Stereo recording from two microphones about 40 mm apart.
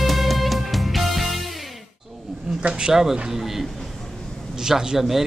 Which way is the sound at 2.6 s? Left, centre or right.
Right.